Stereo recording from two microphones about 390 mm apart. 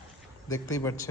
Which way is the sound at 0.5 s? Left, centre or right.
Centre.